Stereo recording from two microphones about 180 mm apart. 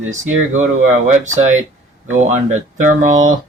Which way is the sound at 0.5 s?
40° right (ahead or behind).